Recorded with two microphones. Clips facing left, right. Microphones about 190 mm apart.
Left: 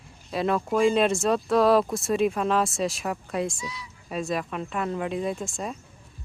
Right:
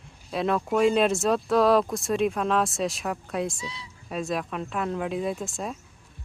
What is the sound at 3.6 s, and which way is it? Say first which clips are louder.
Speech: left 1 dB; 30° right (ahead or behind).